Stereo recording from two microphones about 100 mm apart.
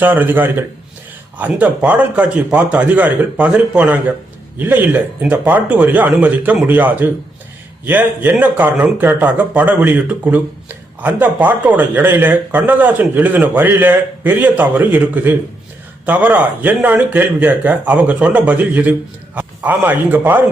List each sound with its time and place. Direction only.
0.0 s a man's voice: 20° right (ahead or behind)